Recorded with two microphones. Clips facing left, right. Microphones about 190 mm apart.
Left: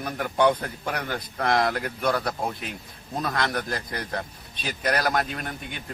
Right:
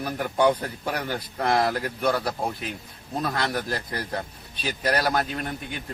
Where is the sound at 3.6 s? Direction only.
30° right (ahead or behind).